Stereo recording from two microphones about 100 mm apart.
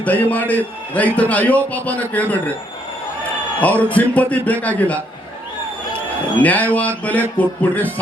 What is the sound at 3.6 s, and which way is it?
Speech, 15° left (ahead or behind).